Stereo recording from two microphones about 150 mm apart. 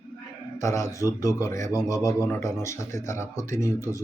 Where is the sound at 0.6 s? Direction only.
20° left (ahead or behind).